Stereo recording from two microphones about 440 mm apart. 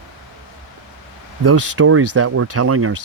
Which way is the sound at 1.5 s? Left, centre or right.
Right.